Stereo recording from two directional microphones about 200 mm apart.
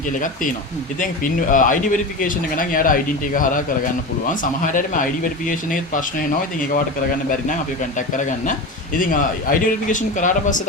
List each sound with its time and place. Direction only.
0.9 s speech: 40° left (ahead or behind)
7.9 s speech: 40° left (ahead or behind)